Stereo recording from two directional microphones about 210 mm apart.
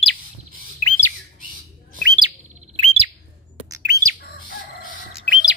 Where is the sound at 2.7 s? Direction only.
25° right (ahead or behind).